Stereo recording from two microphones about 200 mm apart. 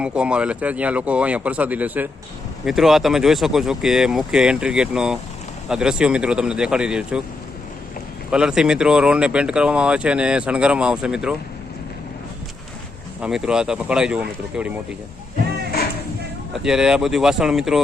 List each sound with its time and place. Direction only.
0.0 s speech: 5° right (ahead or behind)
8.3 s speech: 5° right (ahead or behind)
13.2 s speech: 5° right (ahead or behind)
16.5 s speech: 5° right (ahead or behind)